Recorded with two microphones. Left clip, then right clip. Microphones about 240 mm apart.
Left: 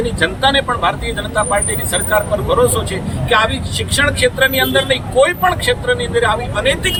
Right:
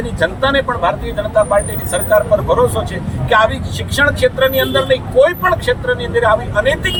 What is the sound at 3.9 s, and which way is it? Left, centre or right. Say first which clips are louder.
Speech: right 2 dB; centre.